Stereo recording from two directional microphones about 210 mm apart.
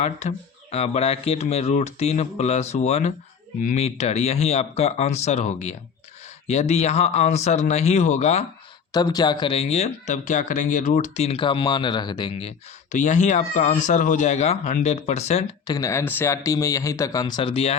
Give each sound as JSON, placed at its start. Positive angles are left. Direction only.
{"t": 0.0, "sound": "speech", "side_deg": 30}
{"t": 8.9, "sound": "speech", "side_deg": 20}
{"t": 15.6, "sound": "speech", "side_deg": 15}